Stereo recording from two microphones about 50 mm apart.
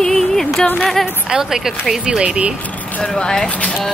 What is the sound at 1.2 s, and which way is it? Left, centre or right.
A woman's voice, centre.